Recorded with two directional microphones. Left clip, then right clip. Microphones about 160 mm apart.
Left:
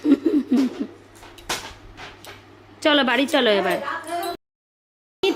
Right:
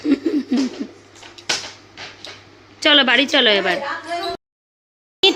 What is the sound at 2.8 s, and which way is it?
A woman's voice, 10° left (ahead or behind).